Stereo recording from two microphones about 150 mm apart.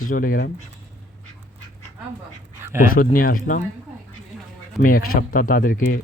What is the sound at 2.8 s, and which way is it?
Speech, 70° left (ahead or behind).